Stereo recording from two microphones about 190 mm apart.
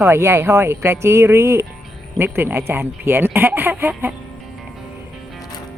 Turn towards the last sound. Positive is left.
turn(degrees=-10)  # may be behind; listen again after turning